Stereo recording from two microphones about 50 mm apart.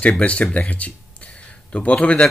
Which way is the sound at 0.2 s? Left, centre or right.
Left.